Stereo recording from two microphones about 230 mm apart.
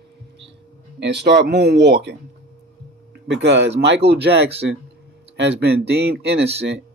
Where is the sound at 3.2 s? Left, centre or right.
Right.